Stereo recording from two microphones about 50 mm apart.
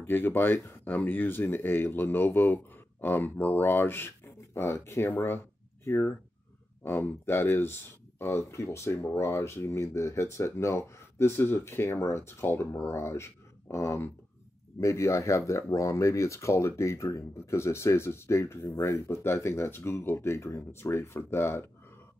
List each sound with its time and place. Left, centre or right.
0.0 s speech: left
4.7 s speech: left
5.1 s speech: left
6.8 s speech: left
8.2 s speech: left
11.3 s speech: left
12.1 s speech: left
14.8 s speech: left
21.2 s speech: left